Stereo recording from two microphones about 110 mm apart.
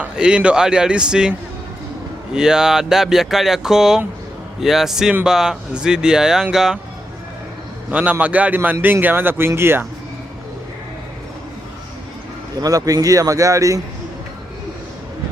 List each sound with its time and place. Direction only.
0.0 s a man's voice: 10° right (ahead or behind)
7.9 s a man's voice: 15° right (ahead or behind)
12.5 s speech: 35° right (ahead or behind)